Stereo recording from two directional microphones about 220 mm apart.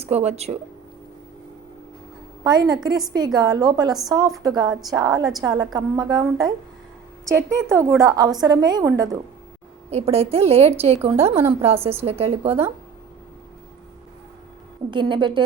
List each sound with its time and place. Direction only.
0.0 s a woman's voice: 30° right (ahead or behind)
2.4 s a woman's voice: 20° right (ahead or behind)
9.9 s a woman's voice: 30° right (ahead or behind)
14.8 s a woman's voice: 20° right (ahead or behind)